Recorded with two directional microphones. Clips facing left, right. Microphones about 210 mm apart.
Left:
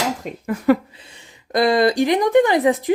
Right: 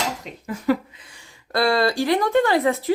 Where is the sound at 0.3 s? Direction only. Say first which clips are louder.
Left 5 dB; 55° left (ahead or behind).